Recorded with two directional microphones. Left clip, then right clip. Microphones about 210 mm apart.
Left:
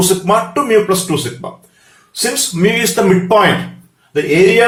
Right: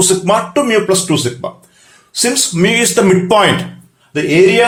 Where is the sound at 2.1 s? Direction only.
45° right (ahead or behind).